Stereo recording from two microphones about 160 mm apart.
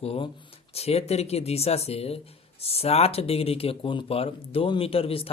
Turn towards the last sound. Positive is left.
turn(degrees=35)  # may be behind; listen again after turning